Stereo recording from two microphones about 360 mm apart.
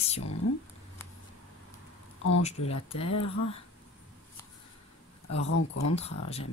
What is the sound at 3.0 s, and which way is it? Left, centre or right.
Speech, left.